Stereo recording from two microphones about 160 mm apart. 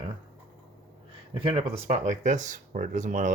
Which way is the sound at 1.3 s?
35° right (ahead or behind).